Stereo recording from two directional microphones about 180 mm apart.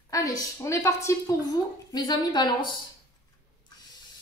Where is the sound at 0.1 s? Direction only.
20° left (ahead or behind).